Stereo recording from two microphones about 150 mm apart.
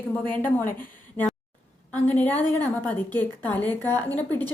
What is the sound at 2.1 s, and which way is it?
A woman's voice, 10° left (ahead or behind).